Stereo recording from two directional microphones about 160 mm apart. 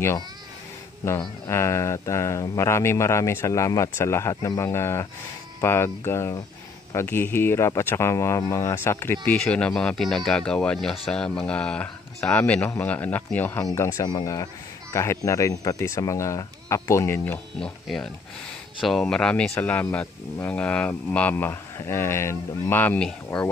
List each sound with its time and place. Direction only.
1.5 s speech: 15° left (ahead or behind)
17.6 s speech: 5° left (ahead or behind)